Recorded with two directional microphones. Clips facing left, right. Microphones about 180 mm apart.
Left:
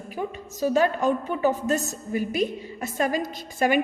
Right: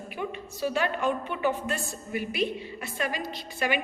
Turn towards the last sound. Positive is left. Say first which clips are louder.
# left 7 dB
turn(degrees=45)  # may be behind; listen again after turning